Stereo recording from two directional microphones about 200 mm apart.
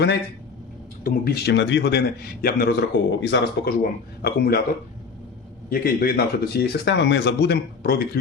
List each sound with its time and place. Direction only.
1.0 s a man's voice: 45° left (ahead or behind)
5.7 s speech: 50° left (ahead or behind)